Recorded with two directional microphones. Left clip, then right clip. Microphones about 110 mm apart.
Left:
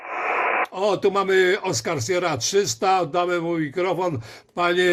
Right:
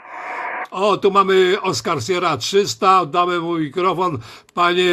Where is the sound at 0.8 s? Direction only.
20° right (ahead or behind).